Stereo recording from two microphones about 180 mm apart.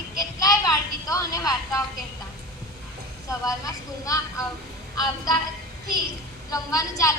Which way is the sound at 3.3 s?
20° left (ahead or behind).